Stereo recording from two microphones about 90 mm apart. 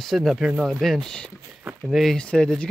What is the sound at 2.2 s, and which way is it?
Speech, 10° left (ahead or behind).